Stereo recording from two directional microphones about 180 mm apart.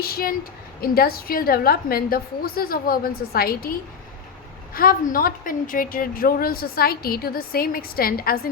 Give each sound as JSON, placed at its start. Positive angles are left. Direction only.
{"t": 0.0, "sound": "a woman's voice", "side_deg": 55}
{"t": 4.7, "sound": "a woman's voice", "side_deg": 55}